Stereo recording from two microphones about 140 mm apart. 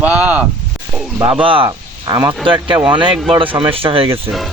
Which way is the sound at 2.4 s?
35° right (ahead or behind).